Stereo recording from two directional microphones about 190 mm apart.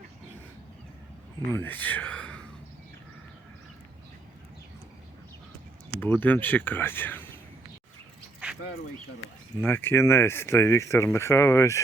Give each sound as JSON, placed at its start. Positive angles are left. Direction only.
{"t": 1.5, "sound": "speech", "side_deg": 10}
{"t": 6.0, "sound": "speech", "side_deg": 10}
{"t": 9.6, "sound": "speech", "side_deg": 10}